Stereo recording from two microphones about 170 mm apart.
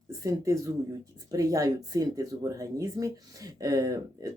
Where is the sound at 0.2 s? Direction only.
20° right (ahead or behind).